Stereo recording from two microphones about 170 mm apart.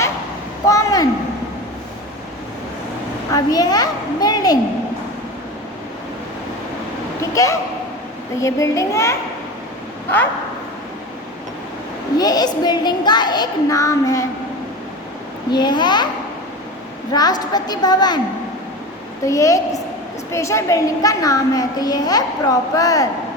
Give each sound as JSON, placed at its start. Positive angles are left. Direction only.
{"t": 0.7, "sound": "a sound", "side_deg": 20}
{"t": 3.3, "sound": "a child's voice", "side_deg": 20}
{"t": 7.2, "sound": "a sound", "side_deg": 20}
{"t": 8.4, "sound": "a child's voice", "side_deg": 20}
{"t": 12.1, "sound": "a child's voice", "side_deg": 20}
{"t": 15.5, "sound": "a child's voice", "side_deg": 25}
{"t": 17.1, "sound": "a child's voice", "side_deg": 25}
{"t": 19.2, "sound": "a child's voice", "side_deg": 20}